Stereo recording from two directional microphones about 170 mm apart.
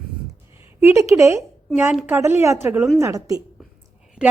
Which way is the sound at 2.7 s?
5° right (ahead or behind).